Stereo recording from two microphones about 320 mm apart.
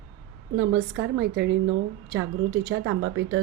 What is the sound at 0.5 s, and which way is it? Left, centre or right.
A woman's voice, right.